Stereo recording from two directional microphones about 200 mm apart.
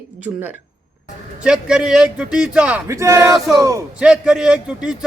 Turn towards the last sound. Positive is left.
turn(degrees=-5)  # may be behind; listen again after turning